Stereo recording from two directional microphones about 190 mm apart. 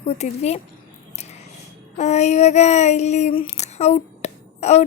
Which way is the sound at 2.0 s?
35° left (ahead or behind).